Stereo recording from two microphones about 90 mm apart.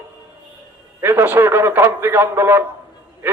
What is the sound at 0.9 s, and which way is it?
Speech, 25° right (ahead or behind).